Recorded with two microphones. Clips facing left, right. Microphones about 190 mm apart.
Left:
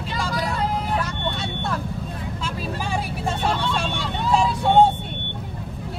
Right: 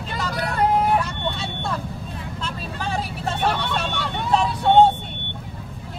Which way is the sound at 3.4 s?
60° right (ahead or behind).